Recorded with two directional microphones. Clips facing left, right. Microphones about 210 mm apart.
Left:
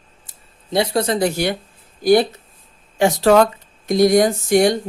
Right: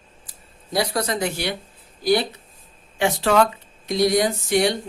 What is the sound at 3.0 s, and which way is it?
Speech, 40° left (ahead or behind).